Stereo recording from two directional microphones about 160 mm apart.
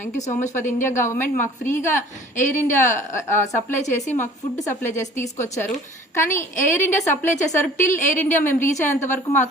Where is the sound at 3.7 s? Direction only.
50° left (ahead or behind).